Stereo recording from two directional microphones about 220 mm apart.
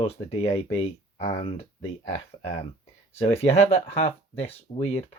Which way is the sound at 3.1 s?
25° left (ahead or behind).